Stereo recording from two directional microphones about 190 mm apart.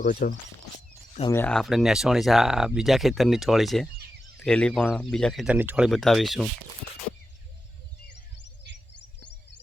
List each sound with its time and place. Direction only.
0.0 s speech: 45° left (ahead or behind)
1.3 s speech: 10° left (ahead or behind)